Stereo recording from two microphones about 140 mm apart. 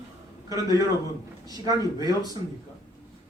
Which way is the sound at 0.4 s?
25° right (ahead or behind).